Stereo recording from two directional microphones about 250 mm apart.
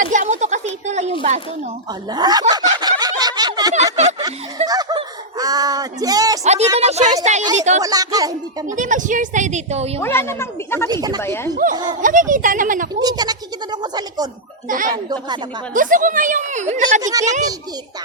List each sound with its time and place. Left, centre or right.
0.0 s a sound: right
2.0 s snicker: centre
4.6 s speech: centre
6.4 s speech: right
7.8 s speech: centre
8.6 s speech: right
10.0 s a woman's voice: centre
10.8 s speech: centre
11.2 s a woman's voice: centre
11.5 s a woman's voice: right
12.9 s a sound: centre
14.7 s a woman's voice: right
17.0 s speech: centre